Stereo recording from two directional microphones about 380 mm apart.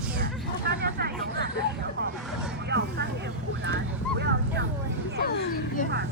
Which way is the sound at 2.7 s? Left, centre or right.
Right.